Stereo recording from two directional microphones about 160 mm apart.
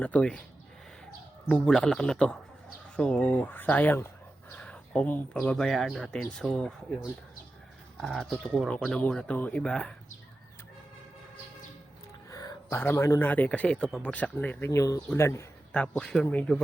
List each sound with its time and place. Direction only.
0.0 s speech: 10° left (ahead or behind)
1.5 s speech: 5° left (ahead or behind)
7.9 s speech: centre (ahead or behind)
12.3 s a sound: 20° left (ahead or behind)
12.8 s speech: 15° left (ahead or behind)